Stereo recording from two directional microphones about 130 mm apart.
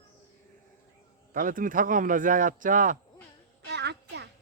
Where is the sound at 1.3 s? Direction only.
90° right.